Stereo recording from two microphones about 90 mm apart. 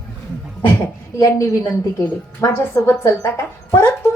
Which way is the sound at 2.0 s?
30° left (ahead or behind).